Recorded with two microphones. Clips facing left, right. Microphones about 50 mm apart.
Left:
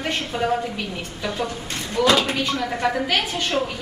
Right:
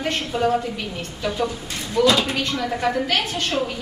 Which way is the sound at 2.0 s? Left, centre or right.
Left.